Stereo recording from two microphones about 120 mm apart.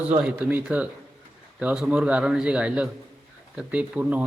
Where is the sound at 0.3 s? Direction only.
10° right (ahead or behind).